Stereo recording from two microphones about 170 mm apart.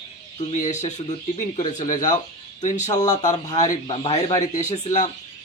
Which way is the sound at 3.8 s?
30° left (ahead or behind).